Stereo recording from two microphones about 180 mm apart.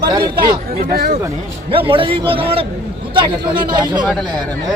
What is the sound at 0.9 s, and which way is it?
Speech, 55° right (ahead or behind).